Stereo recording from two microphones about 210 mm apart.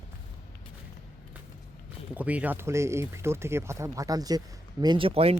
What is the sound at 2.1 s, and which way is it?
Speech, 5° right (ahead or behind).